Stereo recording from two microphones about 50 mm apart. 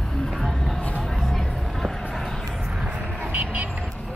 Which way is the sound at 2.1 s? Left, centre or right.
Centre.